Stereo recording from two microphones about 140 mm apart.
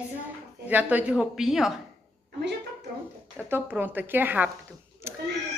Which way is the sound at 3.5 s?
15° right (ahead or behind).